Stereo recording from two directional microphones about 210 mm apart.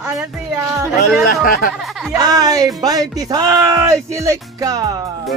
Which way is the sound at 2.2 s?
20° right (ahead or behind).